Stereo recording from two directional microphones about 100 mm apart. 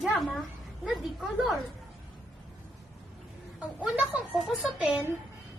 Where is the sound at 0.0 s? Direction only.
Centre (ahead or behind).